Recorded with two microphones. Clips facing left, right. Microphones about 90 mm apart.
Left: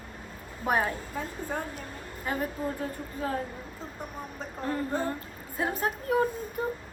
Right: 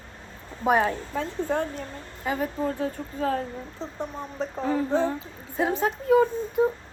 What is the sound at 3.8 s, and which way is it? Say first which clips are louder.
Speech: right 7 dB; 25° right (ahead or behind).